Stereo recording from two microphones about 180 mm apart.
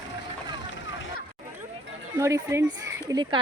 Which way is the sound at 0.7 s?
90° left.